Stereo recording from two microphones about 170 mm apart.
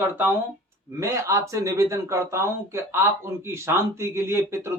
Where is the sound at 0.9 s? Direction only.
15° right (ahead or behind).